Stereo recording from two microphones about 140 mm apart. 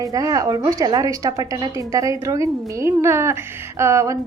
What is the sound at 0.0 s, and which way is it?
A woman's voice, 25° right (ahead or behind).